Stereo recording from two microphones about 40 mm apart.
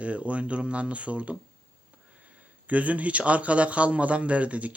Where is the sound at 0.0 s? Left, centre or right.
Right.